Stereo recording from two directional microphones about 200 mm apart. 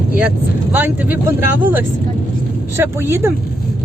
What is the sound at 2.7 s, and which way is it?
Speech, 10° right (ahead or behind).